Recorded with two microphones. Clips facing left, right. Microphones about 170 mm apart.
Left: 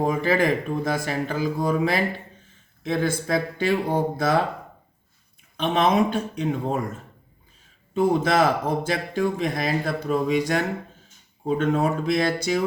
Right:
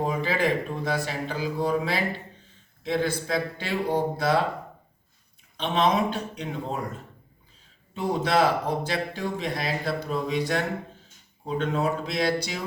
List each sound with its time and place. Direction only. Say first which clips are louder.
0.0 s speech: left 4 dB; 50° left (ahead or behind)
5.5 s speech: left 3 dB; 50° left (ahead or behind)
7.9 s speech: left 4 dB; 50° left (ahead or behind)